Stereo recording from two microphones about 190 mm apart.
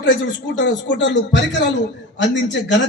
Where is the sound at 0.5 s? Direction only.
70° left (ahead or behind).